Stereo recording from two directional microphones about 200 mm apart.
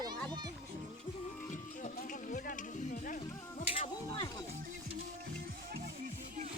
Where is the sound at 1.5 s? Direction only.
40° left (ahead or behind).